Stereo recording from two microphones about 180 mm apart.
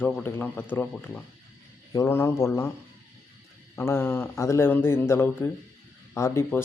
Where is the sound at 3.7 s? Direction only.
15° left (ahead or behind).